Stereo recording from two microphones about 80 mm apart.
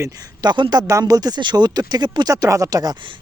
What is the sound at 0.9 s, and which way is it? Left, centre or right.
Speech, right.